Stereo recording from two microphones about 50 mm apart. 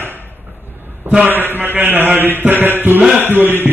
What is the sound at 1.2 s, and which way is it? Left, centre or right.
A man's voice, right.